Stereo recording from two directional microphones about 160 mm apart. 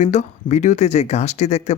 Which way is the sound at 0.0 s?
45° left (ahead or behind).